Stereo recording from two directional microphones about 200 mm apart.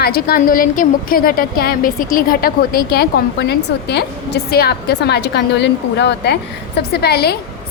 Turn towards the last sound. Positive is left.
turn(degrees=50)  # may be behind; listen again after turning